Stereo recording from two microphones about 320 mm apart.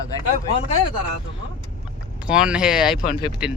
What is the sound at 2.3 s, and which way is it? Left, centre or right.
Speech, centre.